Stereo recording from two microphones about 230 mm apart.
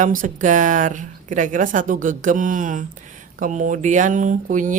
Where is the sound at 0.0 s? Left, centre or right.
Right.